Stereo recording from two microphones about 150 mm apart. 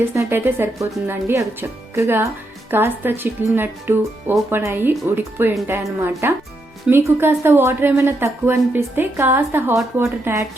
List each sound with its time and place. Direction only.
0.1 s speech: 15° right (ahead or behind)